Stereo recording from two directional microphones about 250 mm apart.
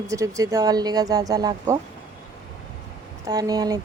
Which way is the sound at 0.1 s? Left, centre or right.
Centre.